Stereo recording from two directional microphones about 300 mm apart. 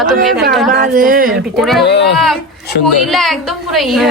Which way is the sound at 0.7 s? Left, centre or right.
Right.